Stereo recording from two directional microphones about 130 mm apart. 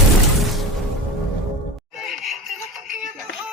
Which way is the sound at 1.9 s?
Centre (ahead or behind).